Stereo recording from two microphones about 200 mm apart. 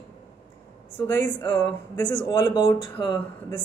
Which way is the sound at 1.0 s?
10° left (ahead or behind).